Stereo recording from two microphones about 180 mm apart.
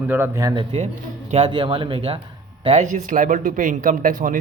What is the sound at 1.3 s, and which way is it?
Speech, 30° right (ahead or behind).